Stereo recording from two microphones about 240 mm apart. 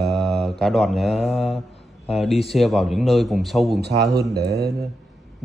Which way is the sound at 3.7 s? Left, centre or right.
Right.